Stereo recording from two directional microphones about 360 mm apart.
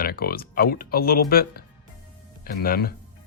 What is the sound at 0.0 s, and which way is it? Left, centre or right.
Speech, left.